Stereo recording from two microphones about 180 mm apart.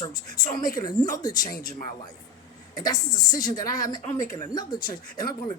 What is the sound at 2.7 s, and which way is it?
Speech, 20° left (ahead or behind).